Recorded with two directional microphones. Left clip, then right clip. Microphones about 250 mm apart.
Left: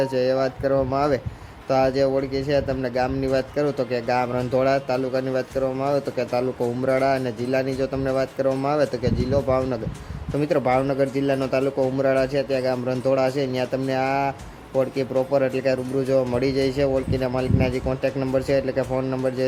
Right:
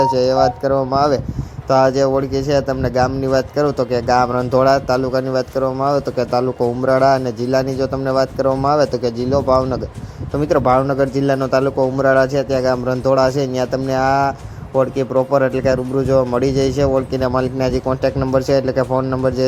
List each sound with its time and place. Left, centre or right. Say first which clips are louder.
0.0 s speech: right 8 dB; centre